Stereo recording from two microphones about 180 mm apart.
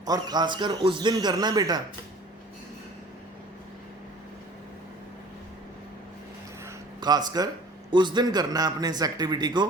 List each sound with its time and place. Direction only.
0.0 s a man's voice: 20° right (ahead or behind)
7.0 s a man's voice: 25° right (ahead or behind)